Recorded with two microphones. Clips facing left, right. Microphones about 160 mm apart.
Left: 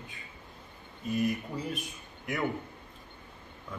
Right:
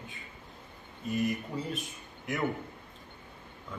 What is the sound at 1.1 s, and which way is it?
Speech, centre (ahead or behind).